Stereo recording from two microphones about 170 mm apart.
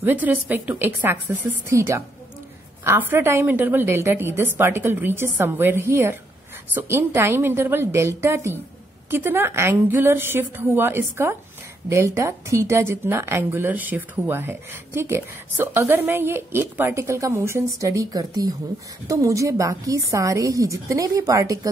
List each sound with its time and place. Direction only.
0.0 s a woman's voice: 10° right (ahead or behind)